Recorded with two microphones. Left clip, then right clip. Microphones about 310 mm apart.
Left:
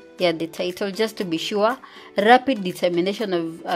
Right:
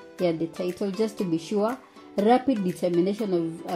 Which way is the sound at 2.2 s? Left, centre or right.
Left.